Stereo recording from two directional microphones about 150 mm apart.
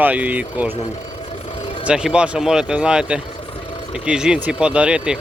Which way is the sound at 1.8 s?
5° right (ahead or behind).